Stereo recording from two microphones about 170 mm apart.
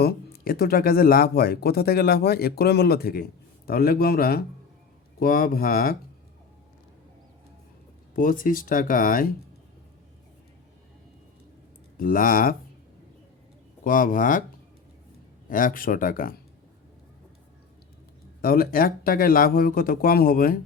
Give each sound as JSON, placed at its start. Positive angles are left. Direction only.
{"t": 0.0, "sound": "speech", "side_deg": 65}
{"t": 8.1, "sound": "speech", "side_deg": 55}
{"t": 11.9, "sound": "speech", "side_deg": 55}
{"t": 13.8, "sound": "speech", "side_deg": 55}
{"t": 15.4, "sound": "speech", "side_deg": 55}
{"t": 18.4, "sound": "speech", "side_deg": 60}